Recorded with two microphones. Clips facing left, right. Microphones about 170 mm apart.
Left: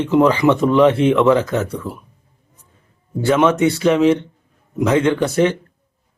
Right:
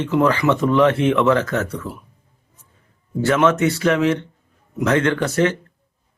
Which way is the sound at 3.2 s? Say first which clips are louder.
Left 2 dB; 15° left (ahead or behind).